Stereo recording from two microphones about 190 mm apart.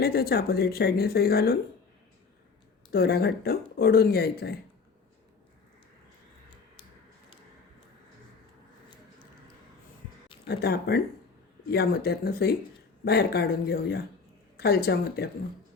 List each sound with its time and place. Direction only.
0.0 s speech: 55° left (ahead or behind)
2.9 s speech: 55° left (ahead or behind)
10.4 s speech: 55° left (ahead or behind)